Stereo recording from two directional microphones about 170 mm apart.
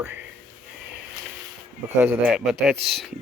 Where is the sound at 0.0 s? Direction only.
10° right (ahead or behind).